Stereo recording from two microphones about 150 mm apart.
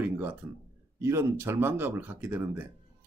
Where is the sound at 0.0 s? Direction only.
15° right (ahead or behind).